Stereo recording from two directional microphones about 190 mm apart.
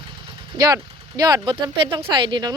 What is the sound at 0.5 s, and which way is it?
Speech, 20° right (ahead or behind).